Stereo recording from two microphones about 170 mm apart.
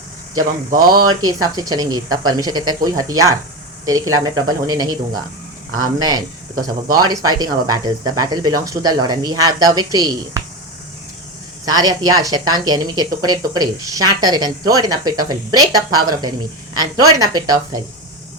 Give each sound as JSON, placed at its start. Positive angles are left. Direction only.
{"t": 0.8, "sound": "speech", "side_deg": -25}
{"t": 6.0, "sound": "speech", "side_deg": -25}
{"t": 11.6, "sound": "speech", "side_deg": -20}